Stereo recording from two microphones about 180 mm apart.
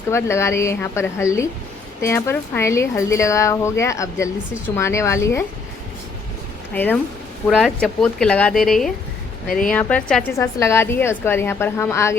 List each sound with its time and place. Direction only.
0.1 s speech: 15° left (ahead or behind)
6.7 s a woman's voice: 10° left (ahead or behind)
9.5 s speech: 50° left (ahead or behind)
9.7 s speech: 5° left (ahead or behind)
10.3 s speech: 15° left (ahead or behind)